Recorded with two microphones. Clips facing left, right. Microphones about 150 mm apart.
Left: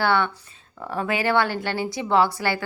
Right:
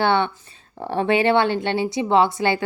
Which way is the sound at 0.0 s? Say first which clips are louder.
Right 2 dB; 25° right (ahead or behind).